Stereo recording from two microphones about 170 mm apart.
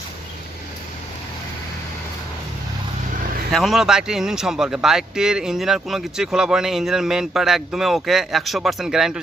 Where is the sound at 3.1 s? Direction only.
50° right (ahead or behind).